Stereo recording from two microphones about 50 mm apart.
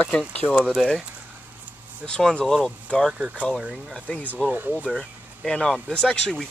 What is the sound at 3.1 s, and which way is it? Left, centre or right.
Speech, right.